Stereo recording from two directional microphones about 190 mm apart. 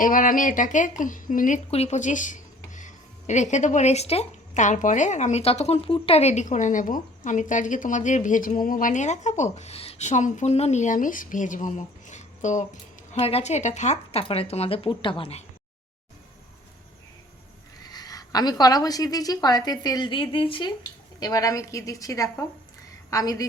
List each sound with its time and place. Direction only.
0.0 s speech: 45° left (ahead or behind)
17.8 s a woman's voice: 20° left (ahead or behind)